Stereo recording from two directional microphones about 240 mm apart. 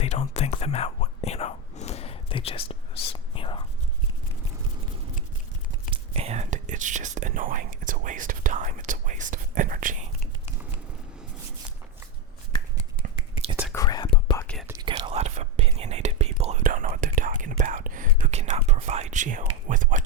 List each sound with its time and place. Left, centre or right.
0.0 s whispering: left
5.9 s speech: right
13.7 s whispering: centre
14.4 s whispering: centre
14.7 s whispering: centre